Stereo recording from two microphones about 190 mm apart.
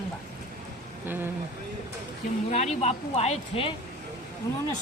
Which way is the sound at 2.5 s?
35° left (ahead or behind).